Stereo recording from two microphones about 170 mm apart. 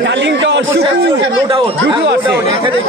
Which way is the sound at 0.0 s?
90° right.